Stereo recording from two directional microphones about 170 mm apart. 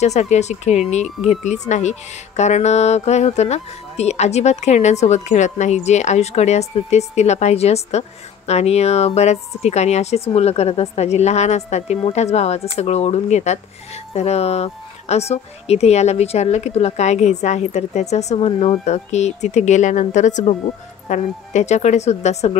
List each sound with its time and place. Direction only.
0.0 s speech: 40° left (ahead or behind)